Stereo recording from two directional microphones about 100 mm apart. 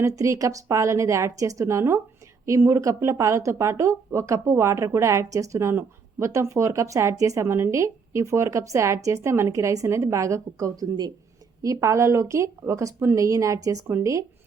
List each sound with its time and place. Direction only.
0.0 s speech: 35° right (ahead or behind)